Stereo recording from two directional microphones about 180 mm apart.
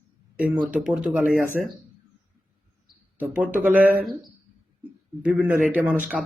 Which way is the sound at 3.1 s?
10° right (ahead or behind).